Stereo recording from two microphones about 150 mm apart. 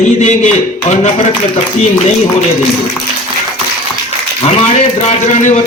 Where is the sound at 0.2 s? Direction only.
50° left (ahead or behind).